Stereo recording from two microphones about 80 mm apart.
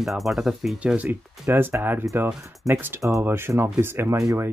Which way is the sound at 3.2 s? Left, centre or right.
Right.